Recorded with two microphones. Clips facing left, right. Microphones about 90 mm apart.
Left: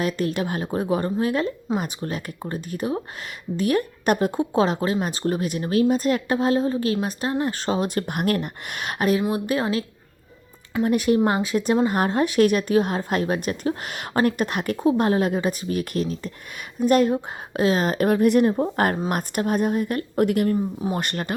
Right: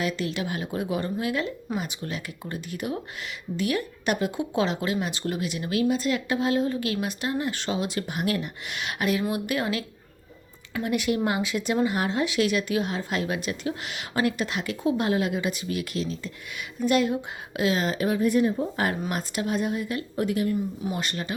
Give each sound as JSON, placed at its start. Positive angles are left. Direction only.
{"t": 0.0, "sound": "speech", "side_deg": 45}
{"t": 10.8, "sound": "a woman's voice", "side_deg": 40}